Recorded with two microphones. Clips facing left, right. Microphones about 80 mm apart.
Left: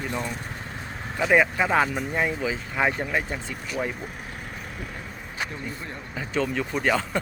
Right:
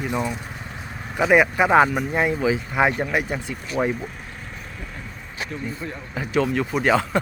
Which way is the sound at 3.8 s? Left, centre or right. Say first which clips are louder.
Right 7 dB; right.